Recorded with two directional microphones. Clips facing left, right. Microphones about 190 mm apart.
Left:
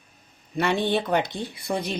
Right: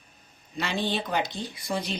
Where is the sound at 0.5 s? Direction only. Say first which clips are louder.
Left 6 dB; 55° left (ahead or behind).